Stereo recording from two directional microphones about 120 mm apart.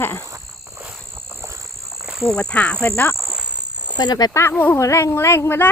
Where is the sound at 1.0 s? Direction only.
20° right (ahead or behind).